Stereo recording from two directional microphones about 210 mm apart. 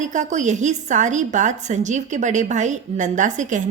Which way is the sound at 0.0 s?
35° right (ahead or behind).